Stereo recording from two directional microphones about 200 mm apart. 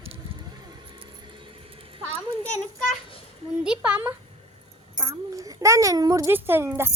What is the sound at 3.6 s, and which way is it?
Speech, 5° right (ahead or behind).